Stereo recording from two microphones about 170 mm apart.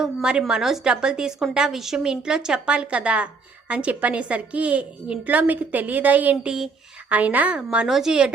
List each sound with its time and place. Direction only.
0.0 s a woman's voice: 5° right (ahead or behind)